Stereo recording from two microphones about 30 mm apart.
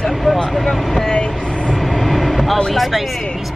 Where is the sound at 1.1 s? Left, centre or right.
Left.